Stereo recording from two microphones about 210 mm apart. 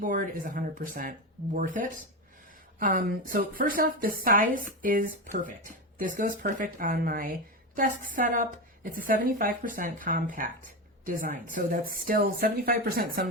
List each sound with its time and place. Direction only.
0.0 s a woman's voice: 40° right (ahead or behind)